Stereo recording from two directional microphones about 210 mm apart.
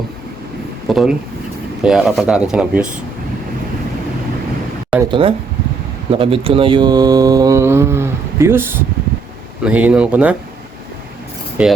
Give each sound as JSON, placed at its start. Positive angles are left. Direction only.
{"t": 0.9, "sound": "speech", "side_deg": 0}
{"t": 5.0, "sound": "speech", "side_deg": -25}
{"t": 11.6, "sound": "speech", "side_deg": -5}